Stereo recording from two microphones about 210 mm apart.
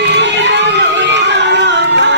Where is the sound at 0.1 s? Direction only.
55° right (ahead or behind).